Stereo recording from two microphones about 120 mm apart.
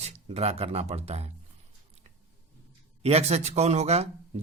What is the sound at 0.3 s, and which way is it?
A man's voice, 60° right (ahead or behind).